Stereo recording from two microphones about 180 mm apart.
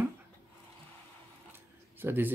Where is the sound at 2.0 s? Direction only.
10° right (ahead or behind).